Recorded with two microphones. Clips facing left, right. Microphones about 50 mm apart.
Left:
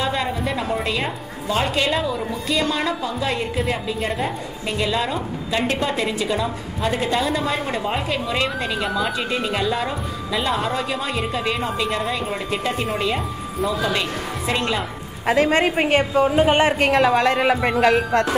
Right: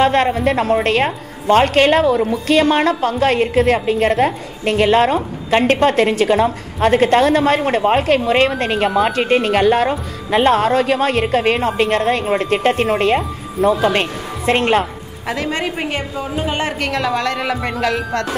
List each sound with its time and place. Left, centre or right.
0.0 s a woman's voice: right
15.2 s a woman's voice: left
16.6 s a woman's voice: left
17.6 s music: centre